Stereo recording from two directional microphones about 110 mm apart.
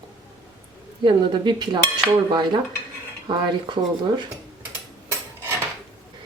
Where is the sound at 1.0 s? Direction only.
45° right (ahead or behind).